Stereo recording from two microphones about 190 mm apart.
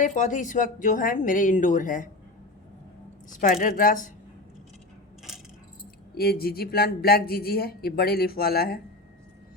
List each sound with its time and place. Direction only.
0.0 s speech: 40° left (ahead or behind)
3.2 s speech: 45° left (ahead or behind)
6.1 s speech: 55° left (ahead or behind)